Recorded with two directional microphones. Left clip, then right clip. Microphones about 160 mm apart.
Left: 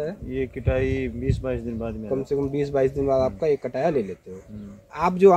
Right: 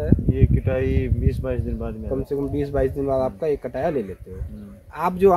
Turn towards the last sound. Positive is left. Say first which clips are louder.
# left 1 dB
turn(degrees=15)  # may be behind; listen again after turning